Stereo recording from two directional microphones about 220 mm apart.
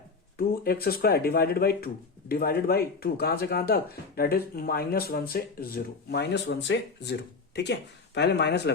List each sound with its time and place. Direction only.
0.3 s speech: 45° left (ahead or behind)